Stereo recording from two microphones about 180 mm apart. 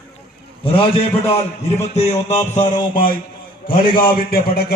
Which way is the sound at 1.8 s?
35° left (ahead or behind).